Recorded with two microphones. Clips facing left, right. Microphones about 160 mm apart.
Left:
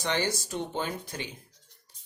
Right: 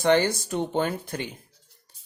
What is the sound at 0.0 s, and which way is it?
Speech, 55° right (ahead or behind).